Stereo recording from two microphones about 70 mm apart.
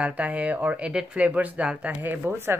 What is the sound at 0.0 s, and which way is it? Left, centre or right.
Speech, centre.